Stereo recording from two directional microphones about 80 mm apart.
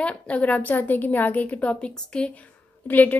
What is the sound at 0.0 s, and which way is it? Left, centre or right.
A woman's voice, centre.